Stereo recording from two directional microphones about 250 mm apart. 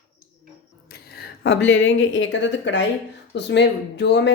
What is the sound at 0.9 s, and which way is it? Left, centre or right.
A woman's voice, left.